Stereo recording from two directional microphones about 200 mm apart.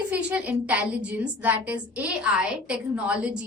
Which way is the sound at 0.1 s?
5° right (ahead or behind).